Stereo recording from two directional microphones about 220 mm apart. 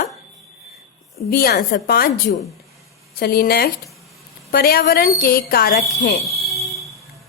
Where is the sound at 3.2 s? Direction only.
45° left (ahead or behind).